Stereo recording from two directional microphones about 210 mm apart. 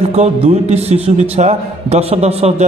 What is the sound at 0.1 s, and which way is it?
A man's voice, 30° right (ahead or behind).